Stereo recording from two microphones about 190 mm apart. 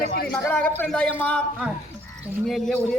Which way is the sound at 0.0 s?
50° left (ahead or behind).